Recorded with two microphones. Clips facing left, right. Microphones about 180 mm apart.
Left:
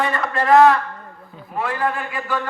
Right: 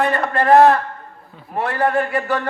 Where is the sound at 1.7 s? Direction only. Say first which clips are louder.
Right 7 dB; 40° right (ahead or behind).